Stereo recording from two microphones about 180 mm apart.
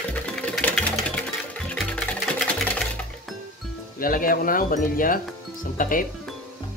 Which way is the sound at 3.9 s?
50° left (ahead or behind).